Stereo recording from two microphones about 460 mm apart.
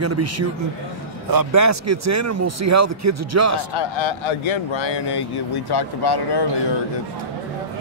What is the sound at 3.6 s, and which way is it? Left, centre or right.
A man's voice, left.